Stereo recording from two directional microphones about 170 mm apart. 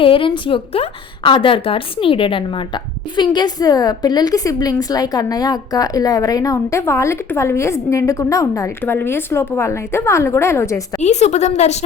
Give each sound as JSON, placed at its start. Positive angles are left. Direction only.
{"t": 0.0, "sound": "a woman's voice", "side_deg": 30}
{"t": 11.0, "sound": "a woman's voice", "side_deg": 40}